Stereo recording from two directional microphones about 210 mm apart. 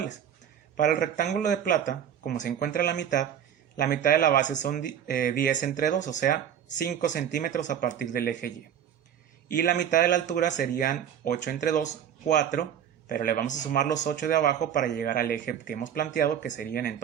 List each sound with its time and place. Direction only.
1.3 s speech: 35° left (ahead or behind)
9.5 s speech: 40° left (ahead or behind)
16.6 s speech: 50° left (ahead or behind)